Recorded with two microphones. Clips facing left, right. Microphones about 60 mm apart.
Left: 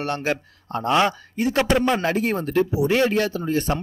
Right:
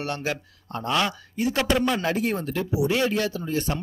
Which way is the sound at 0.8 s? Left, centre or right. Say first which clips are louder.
Left 5 dB; left.